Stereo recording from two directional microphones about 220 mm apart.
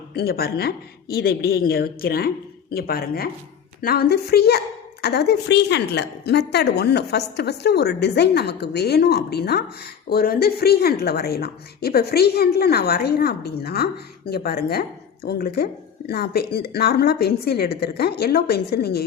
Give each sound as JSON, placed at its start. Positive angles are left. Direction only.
{"t": 0.1, "sound": "speech", "side_deg": 45}